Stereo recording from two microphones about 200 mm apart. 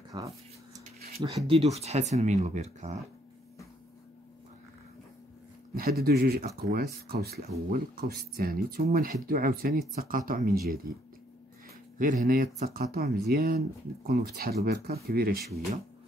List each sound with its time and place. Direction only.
0.1 s speech: 20° right (ahead or behind)
5.8 s speech: 50° right (ahead or behind)
12.0 s speech: 45° right (ahead or behind)